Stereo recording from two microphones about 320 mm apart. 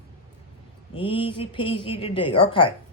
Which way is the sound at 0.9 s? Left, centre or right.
Centre.